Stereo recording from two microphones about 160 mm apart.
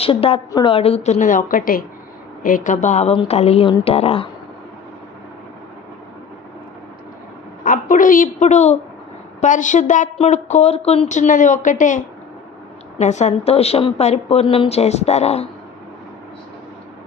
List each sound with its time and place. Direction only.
0.0 s a woman's voice: 35° left (ahead or behind)
7.6 s a woman's voice: 55° left (ahead or behind)